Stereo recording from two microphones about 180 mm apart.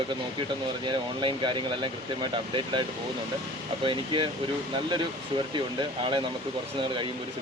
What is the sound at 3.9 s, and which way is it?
Speech, 25° right (ahead or behind).